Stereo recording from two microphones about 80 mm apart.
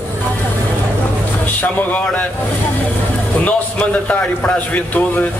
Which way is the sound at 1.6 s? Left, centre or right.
Left.